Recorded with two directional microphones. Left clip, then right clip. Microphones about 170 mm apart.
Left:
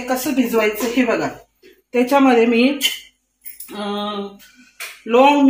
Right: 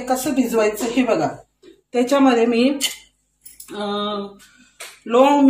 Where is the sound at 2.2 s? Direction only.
20° left (ahead or behind).